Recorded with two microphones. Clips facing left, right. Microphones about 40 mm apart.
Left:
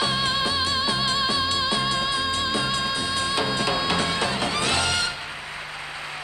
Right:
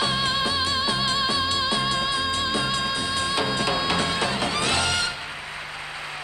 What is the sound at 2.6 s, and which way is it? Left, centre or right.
Music, right.